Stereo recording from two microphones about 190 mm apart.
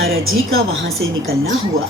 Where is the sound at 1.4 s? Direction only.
90° right.